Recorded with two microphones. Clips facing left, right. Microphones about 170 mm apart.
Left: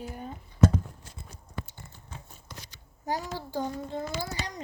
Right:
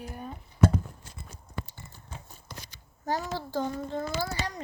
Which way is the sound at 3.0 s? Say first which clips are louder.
Right 2 dB; 15° left (ahead or behind).